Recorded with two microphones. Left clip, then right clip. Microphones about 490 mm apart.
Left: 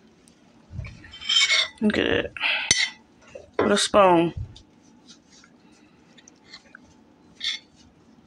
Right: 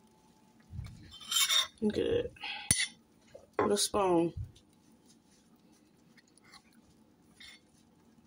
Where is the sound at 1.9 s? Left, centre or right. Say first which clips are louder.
Left 8 dB; right.